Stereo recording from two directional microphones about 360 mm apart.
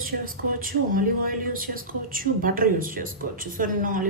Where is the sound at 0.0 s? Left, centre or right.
Right.